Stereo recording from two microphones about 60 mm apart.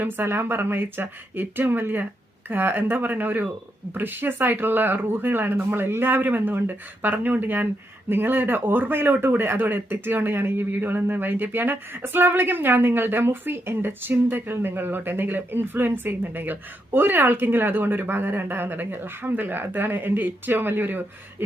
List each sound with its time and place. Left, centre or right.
0.0 s speech: right